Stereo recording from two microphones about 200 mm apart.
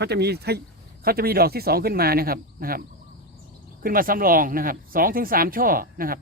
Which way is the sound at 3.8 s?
45° right (ahead or behind).